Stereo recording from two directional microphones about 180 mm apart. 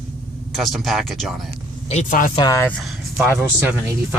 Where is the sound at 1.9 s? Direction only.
45° left (ahead or behind).